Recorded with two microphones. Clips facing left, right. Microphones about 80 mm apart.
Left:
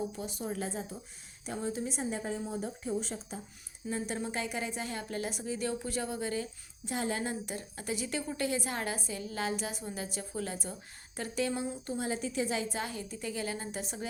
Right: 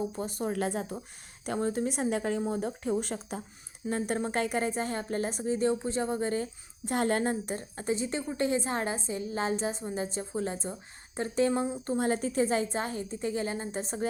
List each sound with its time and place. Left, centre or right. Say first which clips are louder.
0.2 s a woman's voice: right 6 dB; right
11.9 s a woman's voice: right 7 dB; right